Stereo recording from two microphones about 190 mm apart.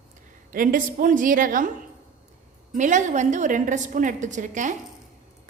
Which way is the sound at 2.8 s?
40° right (ahead or behind).